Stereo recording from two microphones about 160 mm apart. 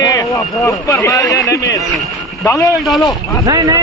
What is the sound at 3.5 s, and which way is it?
Speech, 20° right (ahead or behind).